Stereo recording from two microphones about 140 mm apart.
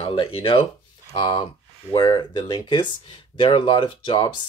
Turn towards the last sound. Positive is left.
turn(degrees=35)  # may be behind; listen again after turning